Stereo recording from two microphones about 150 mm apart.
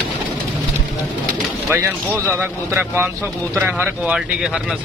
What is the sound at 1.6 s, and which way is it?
Speech, 15° right (ahead or behind).